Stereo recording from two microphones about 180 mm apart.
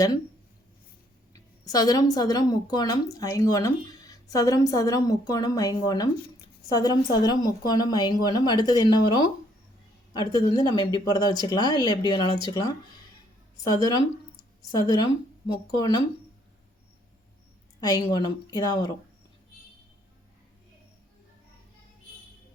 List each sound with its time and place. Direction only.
1.3 s a woman's voice: 20° left (ahead or behind)
17.7 s a woman's voice: 20° left (ahead or behind)